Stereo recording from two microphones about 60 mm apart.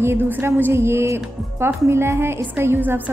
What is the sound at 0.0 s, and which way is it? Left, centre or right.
A woman's voice, right.